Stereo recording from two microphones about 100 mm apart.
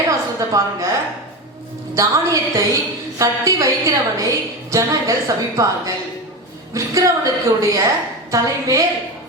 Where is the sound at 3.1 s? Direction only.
35° right (ahead or behind).